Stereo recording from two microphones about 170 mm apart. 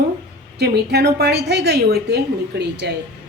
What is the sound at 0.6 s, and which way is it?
A woman's voice, 75° right (ahead or behind).